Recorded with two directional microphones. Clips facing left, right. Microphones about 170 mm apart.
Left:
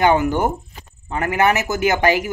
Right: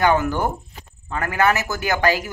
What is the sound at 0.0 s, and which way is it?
Speech, 20° left (ahead or behind).